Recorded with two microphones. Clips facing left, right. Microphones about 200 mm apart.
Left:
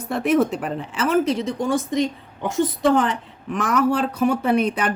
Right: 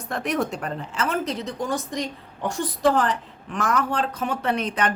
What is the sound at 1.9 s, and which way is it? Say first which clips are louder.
A woman's voice: left 7 dB; centre (ahead or behind).